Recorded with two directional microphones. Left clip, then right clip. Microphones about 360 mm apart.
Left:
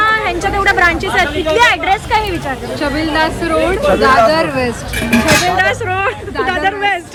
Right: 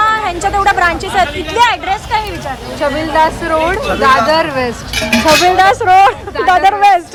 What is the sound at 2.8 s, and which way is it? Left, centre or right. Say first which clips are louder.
Speech: right 4 dB; centre.